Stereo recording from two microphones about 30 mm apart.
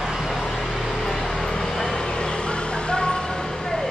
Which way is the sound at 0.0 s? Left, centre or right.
Centre.